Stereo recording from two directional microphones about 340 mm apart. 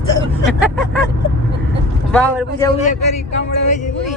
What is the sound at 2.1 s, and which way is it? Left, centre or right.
Speech, centre.